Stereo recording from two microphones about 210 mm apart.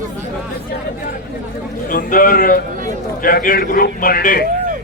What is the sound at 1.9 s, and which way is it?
A man's voice, 40° left (ahead or behind).